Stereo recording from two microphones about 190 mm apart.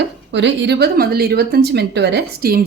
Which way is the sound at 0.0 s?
70° right (ahead or behind).